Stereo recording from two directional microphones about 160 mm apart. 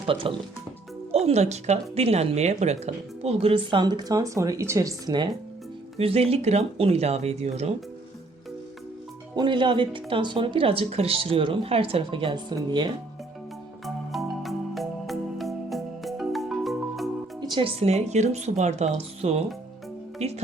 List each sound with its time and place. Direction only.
0.0 s speech: 35° right (ahead or behind)
6.0 s speech: 35° right (ahead or behind)
9.3 s speech: 30° right (ahead or behind)
13.8 s music: centre (ahead or behind)
17.4 s speech: 30° right (ahead or behind)